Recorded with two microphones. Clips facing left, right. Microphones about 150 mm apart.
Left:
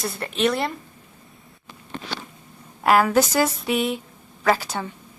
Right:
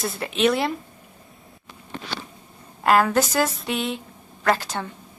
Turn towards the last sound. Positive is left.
turn(degrees=5)  # may be behind; listen again after turning